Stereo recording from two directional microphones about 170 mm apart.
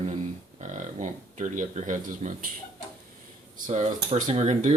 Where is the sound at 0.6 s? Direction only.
45° right (ahead or behind).